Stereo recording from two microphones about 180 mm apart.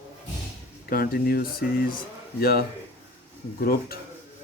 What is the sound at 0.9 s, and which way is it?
Speech, 55° left (ahead or behind).